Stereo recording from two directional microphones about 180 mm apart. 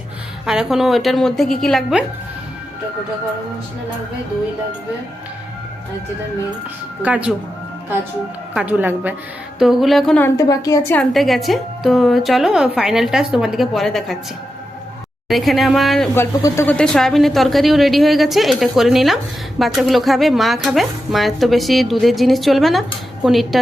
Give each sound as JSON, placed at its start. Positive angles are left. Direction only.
{"t": 0.4, "sound": "speech", "side_deg": -5}
{"t": 7.0, "sound": "a woman's voice", "side_deg": -5}
{"t": 8.5, "sound": "a woman's voice", "side_deg": -10}
{"t": 10.2, "sound": "a woman's voice", "side_deg": 20}
{"t": 10.9, "sound": "speech", "side_deg": 0}
{"t": 15.3, "sound": "speech", "side_deg": 0}
{"t": 16.1, "sound": "speech", "side_deg": 15}